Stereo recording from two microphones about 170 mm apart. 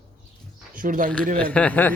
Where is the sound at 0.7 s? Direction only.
55° right (ahead or behind).